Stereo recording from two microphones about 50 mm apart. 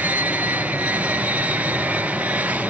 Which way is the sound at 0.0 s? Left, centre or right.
Right.